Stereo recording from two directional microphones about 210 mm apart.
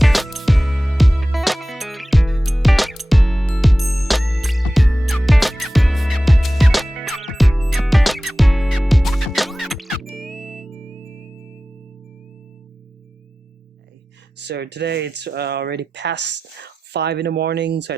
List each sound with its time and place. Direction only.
0.0 s music: centre (ahead or behind)
14.3 s speech: 55° right (ahead or behind)